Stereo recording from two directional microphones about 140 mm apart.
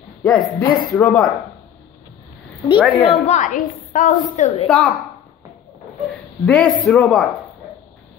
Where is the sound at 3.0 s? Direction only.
45° left (ahead or behind); by 4.5 s 70° left (ahead or behind).